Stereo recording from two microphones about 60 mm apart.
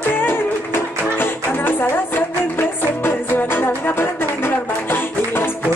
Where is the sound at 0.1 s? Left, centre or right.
Left.